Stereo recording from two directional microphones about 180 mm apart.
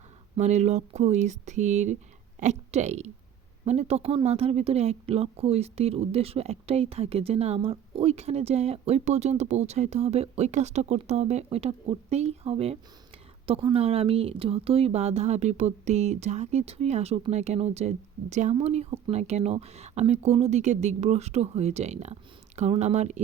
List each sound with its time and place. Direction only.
0.3 s speech: 40° right (ahead or behind)